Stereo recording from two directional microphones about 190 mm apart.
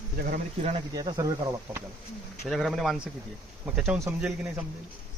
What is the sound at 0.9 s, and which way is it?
Speech, 20° right (ahead or behind).